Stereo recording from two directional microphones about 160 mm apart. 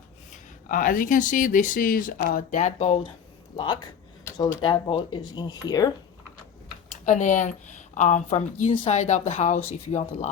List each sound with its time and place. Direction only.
0.7 s speech: 60° left (ahead or behind); by 3.1 s 40° left (ahead or behind)
3.5 s speech: 30° left (ahead or behind)
6.9 s speech: 50° left (ahead or behind)